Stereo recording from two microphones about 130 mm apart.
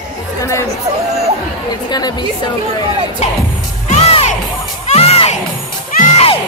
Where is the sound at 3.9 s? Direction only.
50° left (ahead or behind).